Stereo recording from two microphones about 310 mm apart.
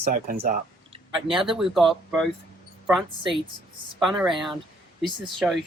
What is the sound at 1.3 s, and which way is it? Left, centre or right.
Speech, centre.